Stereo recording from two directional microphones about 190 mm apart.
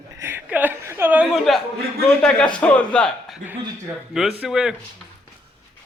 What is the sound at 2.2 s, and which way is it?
A man's voice, 5° left (ahead or behind).